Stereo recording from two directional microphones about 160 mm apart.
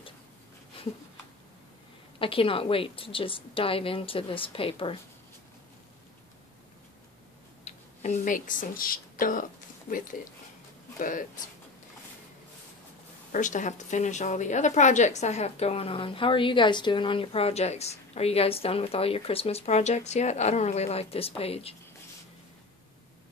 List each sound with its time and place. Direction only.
2.1 s a woman's voice: 35° left (ahead or behind)
7.6 s speech: 45° left (ahead or behind)
13.3 s a woman's voice: 50° left (ahead or behind)